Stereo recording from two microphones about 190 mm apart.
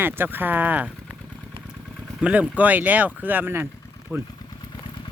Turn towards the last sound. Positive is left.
turn(degrees=0)  # may be behind; listen again after turning